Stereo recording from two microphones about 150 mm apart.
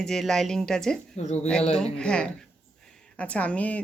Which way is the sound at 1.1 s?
50° left (ahead or behind).